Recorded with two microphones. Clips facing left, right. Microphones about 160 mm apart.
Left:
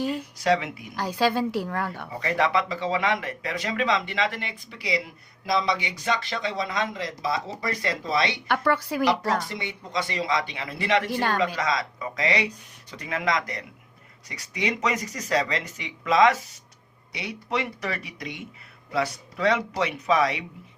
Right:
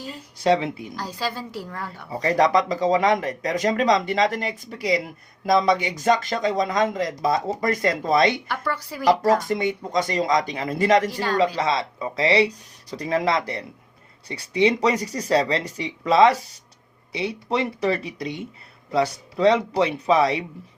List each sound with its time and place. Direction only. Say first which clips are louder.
0.4 s speech: right 4 dB; 30° right (ahead or behind)
0.9 s a woman's voice: left 10 dB; 60° left (ahead or behind)
2.1 s speech: right 5 dB; 35° right (ahead or behind)
8.4 s a woman's voice: left 4 dB; 60° left (ahead or behind)
9.4 s speech: right 10 dB; 45° right (ahead or behind)
11.3 s speech: right 4 dB; 30° right (ahead or behind)